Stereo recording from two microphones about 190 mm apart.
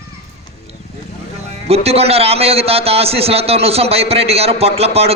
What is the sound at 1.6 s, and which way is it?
A man's voice, 30° right (ahead or behind).